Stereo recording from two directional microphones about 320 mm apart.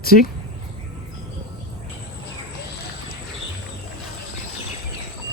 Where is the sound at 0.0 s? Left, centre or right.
Left.